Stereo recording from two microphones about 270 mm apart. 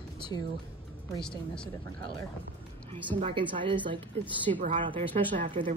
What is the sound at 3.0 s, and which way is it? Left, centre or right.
Speech, right.